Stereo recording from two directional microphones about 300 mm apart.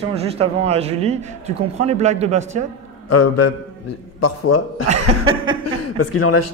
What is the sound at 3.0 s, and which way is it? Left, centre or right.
A man's voice, left.